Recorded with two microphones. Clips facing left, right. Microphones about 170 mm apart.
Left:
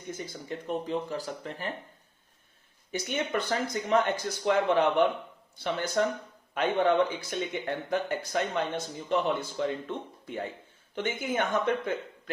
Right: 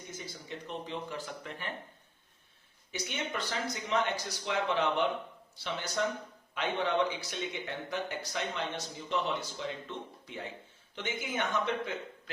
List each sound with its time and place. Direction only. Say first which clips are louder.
0.1 s speech: left 8 dB; 50° left (ahead or behind)
2.9 s speech: left 7 dB; 50° left (ahead or behind)